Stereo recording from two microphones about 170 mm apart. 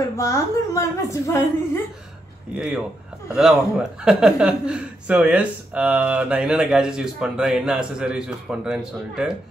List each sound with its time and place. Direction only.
0.2 s a woman's voice: 15° left (ahead or behind)
2.5 s a man's voice: 5° right (ahead or behind)